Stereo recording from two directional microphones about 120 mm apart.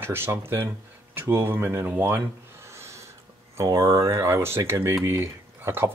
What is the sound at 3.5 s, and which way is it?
Speech, 25° right (ahead or behind).